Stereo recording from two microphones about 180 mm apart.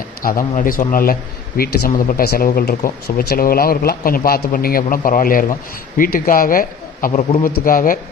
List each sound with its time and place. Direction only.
0.2 s speech: 50° left (ahead or behind)